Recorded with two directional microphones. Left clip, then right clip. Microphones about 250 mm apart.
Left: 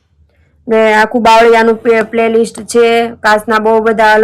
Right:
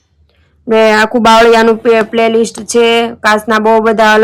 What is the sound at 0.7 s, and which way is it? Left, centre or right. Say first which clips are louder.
Speech: right 1 dB; centre.